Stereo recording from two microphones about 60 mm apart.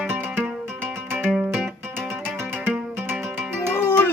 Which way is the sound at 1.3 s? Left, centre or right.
Centre.